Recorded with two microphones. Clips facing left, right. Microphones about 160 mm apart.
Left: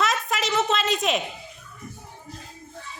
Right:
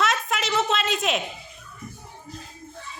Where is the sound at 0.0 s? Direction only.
Centre (ahead or behind).